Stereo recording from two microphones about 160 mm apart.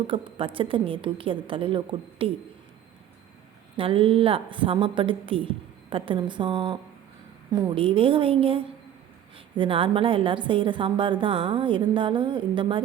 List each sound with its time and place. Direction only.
0.1 s a woman's voice: 35° right (ahead or behind)
3.8 s a woman's voice: 35° right (ahead or behind)